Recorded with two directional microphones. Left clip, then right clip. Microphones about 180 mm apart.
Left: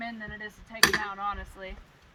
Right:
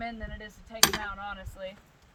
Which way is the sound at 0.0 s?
55° right (ahead or behind).